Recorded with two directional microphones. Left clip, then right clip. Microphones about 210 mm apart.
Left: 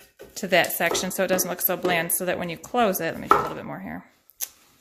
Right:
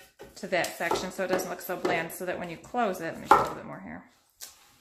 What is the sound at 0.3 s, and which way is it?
Speech, 45° left (ahead or behind).